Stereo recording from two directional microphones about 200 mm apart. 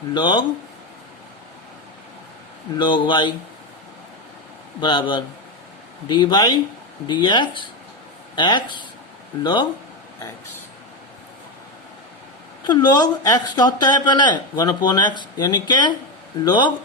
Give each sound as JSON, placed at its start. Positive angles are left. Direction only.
{"t": 0.1, "sound": "speech", "side_deg": 20}
{"t": 2.7, "sound": "speech", "side_deg": 25}
{"t": 4.8, "sound": "speech", "side_deg": 25}
{"t": 12.6, "sound": "speech", "side_deg": 20}